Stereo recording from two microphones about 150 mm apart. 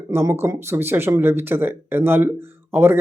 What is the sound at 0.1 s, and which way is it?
Speech, 15° right (ahead or behind).